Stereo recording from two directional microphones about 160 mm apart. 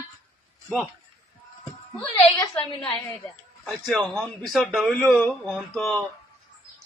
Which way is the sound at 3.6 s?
Centre (ahead or behind).